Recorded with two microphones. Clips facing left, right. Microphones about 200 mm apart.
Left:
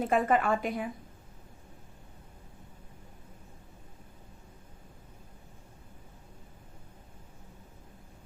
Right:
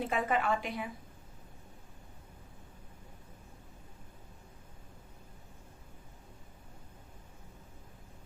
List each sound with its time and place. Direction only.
0.0 s a woman's voice: 45° left (ahead or behind)